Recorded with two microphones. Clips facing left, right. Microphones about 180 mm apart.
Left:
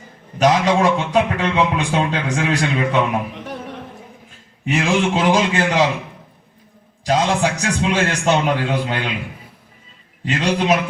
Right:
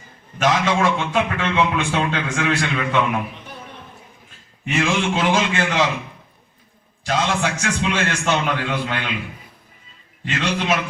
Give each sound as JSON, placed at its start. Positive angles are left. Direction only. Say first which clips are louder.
{"t": 0.3, "sound": "speech", "louder": "left 4 dB", "side_deg": 35}
{"t": 3.3, "sound": "music", "louder": "left 8 dB", "side_deg": 90}
{"t": 4.7, "sound": "speech", "louder": "left 3 dB", "side_deg": 35}
{"t": 7.0, "sound": "speech", "louder": "left 4 dB", "side_deg": 35}
{"t": 10.2, "sound": "speech", "louder": "left 4 dB", "side_deg": 40}